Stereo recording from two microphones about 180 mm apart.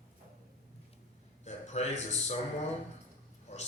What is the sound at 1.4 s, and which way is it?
Speech, 40° left (ahead or behind).